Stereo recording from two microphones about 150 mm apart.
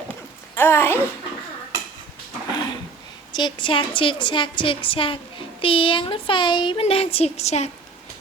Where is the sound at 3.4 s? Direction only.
30° left (ahead or behind); by 7.6 s 45° left (ahead or behind).